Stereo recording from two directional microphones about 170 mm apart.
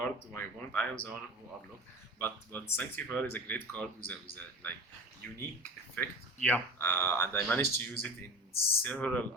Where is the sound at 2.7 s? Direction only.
10° left (ahead or behind).